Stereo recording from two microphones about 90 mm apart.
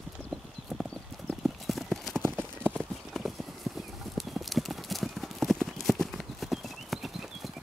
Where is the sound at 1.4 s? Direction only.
Centre (ahead or behind).